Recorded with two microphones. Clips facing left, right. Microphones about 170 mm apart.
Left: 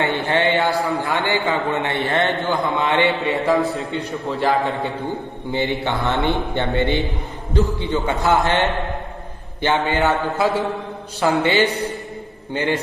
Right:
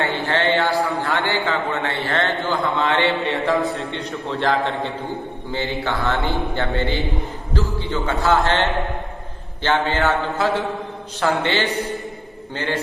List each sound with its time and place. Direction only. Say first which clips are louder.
0.2 s a sound: left 1 dB; 15° left (ahead or behind)
0.9 s a man's voice: left 1 dB; 15° left (ahead or behind)
3.5 s a man's voice: left 2 dB; centre (ahead or behind)
5.5 s a man's voice: left 3 dB; 20° left (ahead or behind)